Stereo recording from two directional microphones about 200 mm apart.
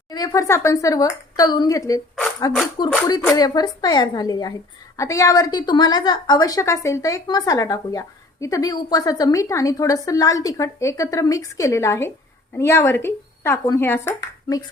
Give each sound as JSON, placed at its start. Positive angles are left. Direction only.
{"t": 0.1, "sound": "a woman's voice", "side_deg": 20}